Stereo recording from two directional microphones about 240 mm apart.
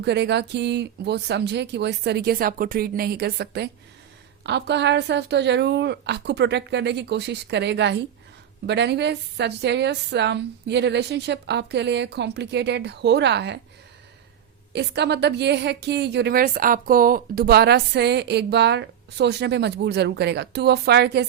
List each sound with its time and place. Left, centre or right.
0.0 s a woman's voice: right
14.7 s a woman's voice: right